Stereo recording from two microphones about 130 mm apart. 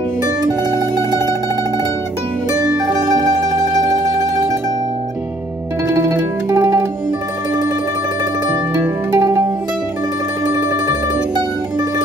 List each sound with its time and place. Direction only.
0.2 s mandolin: 30° right (ahead or behind)
3.1 s music: 30° right (ahead or behind)
5.9 s zither: 20° right (ahead or behind)
6.5 s music: 20° right (ahead or behind)
9.1 s music: 25° right (ahead or behind)
10.4 s music: 30° right (ahead or behind)